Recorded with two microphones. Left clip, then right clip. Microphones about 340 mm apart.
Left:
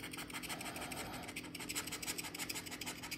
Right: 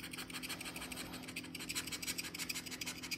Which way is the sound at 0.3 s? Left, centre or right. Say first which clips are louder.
Left 1 dB; centre.